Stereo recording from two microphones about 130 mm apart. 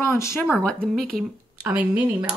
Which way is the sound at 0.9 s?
5° left (ahead or behind).